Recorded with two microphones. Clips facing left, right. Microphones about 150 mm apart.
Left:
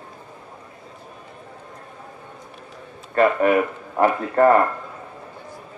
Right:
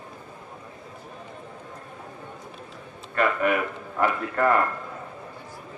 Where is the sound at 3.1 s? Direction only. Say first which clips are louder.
Left 6 dB; 35° left (ahead or behind).